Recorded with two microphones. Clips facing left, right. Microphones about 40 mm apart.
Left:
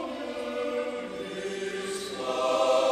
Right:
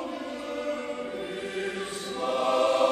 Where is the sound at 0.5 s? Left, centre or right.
Centre.